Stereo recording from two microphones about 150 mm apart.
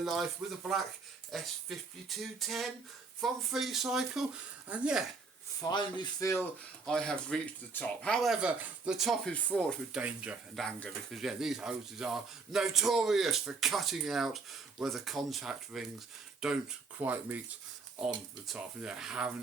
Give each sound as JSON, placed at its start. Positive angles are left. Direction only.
{"t": 0.0, "sound": "speech", "side_deg": 0}
{"t": 5.6, "sound": "speech", "side_deg": 30}
{"t": 6.8, "sound": "speech", "side_deg": 5}
{"t": 9.9, "sound": "speech", "side_deg": -10}
{"t": 18.4, "sound": "speech", "side_deg": -5}